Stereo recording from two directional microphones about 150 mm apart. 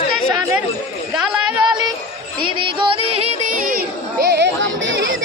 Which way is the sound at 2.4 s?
35° right (ahead or behind).